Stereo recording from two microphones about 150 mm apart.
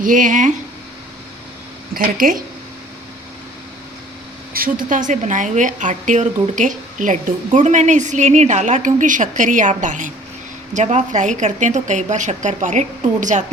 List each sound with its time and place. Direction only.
0.0 s a woman's voice: 60° right (ahead or behind)
1.9 s speech: 70° right (ahead or behind)
4.5 s a woman's voice: 70° right (ahead or behind)